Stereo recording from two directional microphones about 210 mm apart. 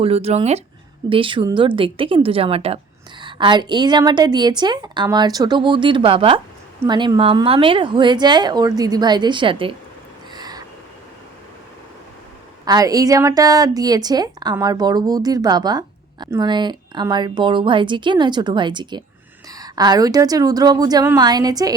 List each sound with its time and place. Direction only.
0.0 s a woman's voice: 30° right (ahead or behind)
10.3 s a sound: 20° right (ahead or behind)
12.6 s a woman's voice: 15° right (ahead or behind)